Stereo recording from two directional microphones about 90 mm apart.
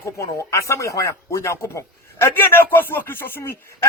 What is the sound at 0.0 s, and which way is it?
Speech, 35° left (ahead or behind).